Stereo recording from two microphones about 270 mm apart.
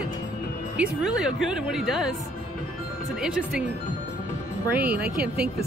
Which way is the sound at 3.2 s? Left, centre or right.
Centre.